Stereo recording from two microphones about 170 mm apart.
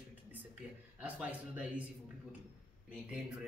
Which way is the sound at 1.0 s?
10° right (ahead or behind).